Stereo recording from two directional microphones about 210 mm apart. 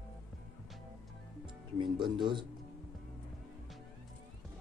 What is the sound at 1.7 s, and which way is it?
Speech, 20° right (ahead or behind).